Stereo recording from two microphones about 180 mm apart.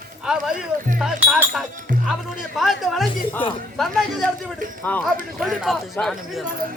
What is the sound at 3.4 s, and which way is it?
Speech, 30° left (ahead or behind).